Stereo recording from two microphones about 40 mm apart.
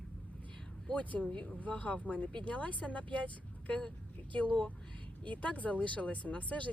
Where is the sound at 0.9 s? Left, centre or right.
Left.